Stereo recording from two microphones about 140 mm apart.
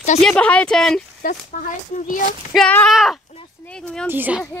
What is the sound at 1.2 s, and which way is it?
Speech, 65° left (ahead or behind).